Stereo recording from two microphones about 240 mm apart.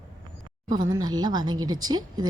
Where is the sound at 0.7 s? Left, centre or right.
Centre.